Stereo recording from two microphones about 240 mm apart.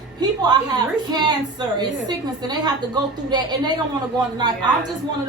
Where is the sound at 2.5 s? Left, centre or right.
Centre.